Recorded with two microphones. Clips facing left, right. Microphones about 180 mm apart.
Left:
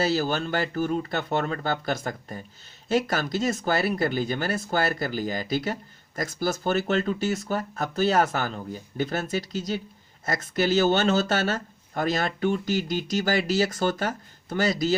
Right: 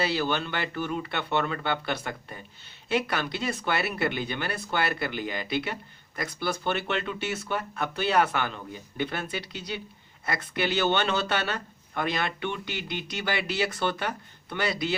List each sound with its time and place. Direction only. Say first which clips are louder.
0.0 s speech: left 3 dB; 45° left (ahead or behind)